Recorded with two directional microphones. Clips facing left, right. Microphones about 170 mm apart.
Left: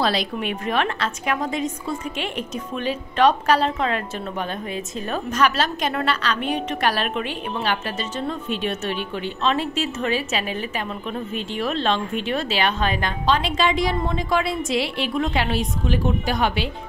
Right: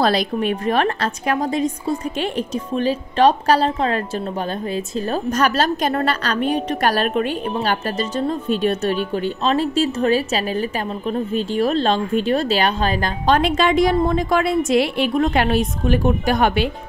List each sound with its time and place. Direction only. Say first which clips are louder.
0.0 s a woman's voice: right 5 dB; 45° right (ahead or behind)